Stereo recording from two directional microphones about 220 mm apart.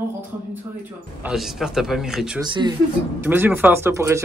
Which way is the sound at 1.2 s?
Centre (ahead or behind).